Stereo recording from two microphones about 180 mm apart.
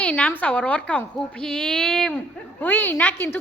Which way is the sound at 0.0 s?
5° left (ahead or behind).